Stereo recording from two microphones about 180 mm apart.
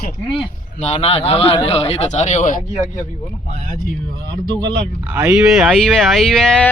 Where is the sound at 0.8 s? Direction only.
35° left (ahead or behind).